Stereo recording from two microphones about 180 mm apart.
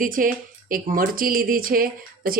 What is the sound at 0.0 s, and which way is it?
Speech, 50° right (ahead or behind).